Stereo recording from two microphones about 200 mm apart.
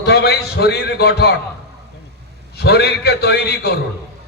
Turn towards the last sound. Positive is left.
turn(degrees=55)  # may be behind; listen again after turning